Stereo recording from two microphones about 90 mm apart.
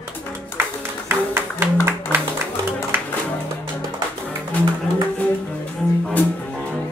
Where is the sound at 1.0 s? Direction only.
25° right (ahead or behind).